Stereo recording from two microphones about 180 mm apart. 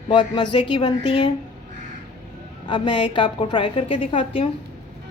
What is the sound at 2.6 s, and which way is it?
A woman's voice, 25° left (ahead or behind).